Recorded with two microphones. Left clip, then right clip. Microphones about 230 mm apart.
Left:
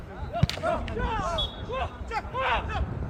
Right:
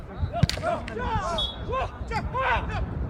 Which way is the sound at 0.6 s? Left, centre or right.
Centre.